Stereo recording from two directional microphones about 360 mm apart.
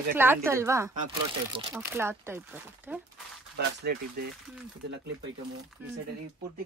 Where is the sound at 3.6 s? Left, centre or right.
Right.